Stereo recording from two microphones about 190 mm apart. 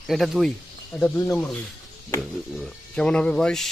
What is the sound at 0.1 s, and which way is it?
Speech, centre (ahead or behind).